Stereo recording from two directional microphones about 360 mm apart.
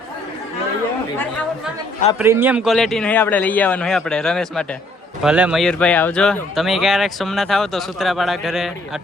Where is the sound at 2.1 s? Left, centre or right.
Centre.